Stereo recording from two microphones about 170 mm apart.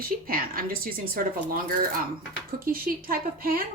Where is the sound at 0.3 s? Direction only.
55° right (ahead or behind).